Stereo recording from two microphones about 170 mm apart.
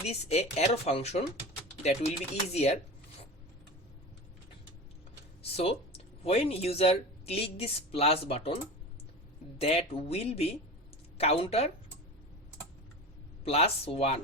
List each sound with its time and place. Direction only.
0.0 s speech: 40° left (ahead or behind)
5.4 s speech: 35° left (ahead or behind)
9.6 s speech: 35° left (ahead or behind)
13.4 s speech: 35° left (ahead or behind)